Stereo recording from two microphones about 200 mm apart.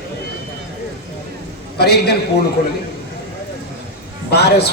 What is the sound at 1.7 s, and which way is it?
Speech, 55° left (ahead or behind).